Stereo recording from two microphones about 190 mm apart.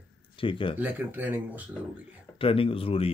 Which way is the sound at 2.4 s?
30° left (ahead or behind).